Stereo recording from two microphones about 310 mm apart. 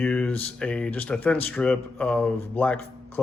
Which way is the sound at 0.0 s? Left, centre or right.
Centre.